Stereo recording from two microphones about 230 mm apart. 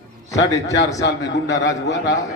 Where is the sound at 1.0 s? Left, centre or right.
Left.